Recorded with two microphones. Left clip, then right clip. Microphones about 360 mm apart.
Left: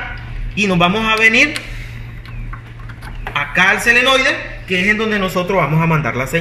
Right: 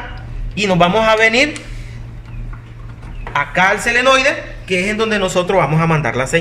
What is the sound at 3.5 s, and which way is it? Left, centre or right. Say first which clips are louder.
A man's voice: left 3 dB; right.